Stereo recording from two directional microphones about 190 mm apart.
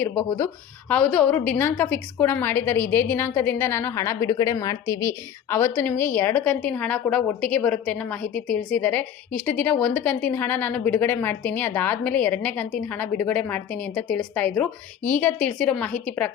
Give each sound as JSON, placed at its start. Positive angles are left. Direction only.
{"t": 0.0, "sound": "a woman's voice", "side_deg": 15}